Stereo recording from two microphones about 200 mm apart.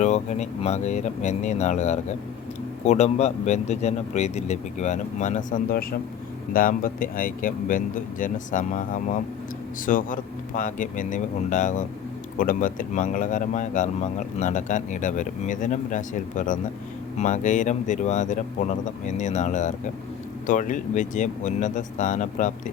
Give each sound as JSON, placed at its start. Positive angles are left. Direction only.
{"t": 0.0, "sound": "speech", "side_deg": 35}